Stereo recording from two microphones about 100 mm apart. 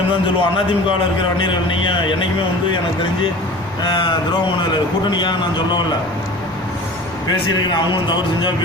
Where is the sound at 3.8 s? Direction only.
50° left (ahead or behind).